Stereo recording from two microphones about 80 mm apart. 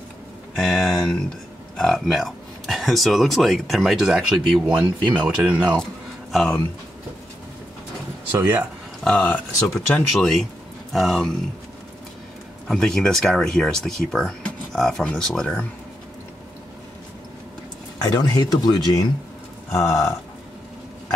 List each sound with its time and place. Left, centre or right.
0.6 s a sound: centre
1.8 s speech: centre
6.3 s speech: centre
8.3 s speech: right
9.0 s speech: centre
10.1 s speech: centre
12.6 s speech: centre
18.0 s speech: left
19.7 s speech: left